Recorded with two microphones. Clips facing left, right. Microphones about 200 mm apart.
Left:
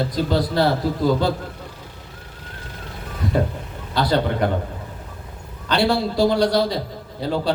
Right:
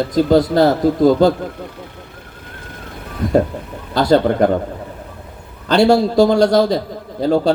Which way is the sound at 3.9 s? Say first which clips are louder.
Right 7 dB; 45° right (ahead or behind).